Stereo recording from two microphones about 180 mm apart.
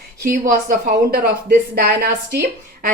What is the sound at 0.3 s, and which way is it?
A woman's voice, 50° right (ahead or behind).